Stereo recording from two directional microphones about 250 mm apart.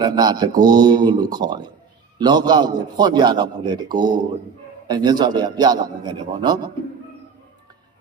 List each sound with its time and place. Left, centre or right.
0.0 s a man's voice: centre